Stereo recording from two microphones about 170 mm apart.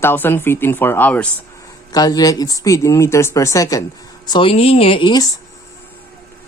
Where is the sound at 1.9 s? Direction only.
20° left (ahead or behind).